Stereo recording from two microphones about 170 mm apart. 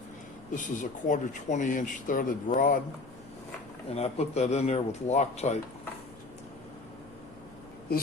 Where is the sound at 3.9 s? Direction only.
40° left (ahead or behind).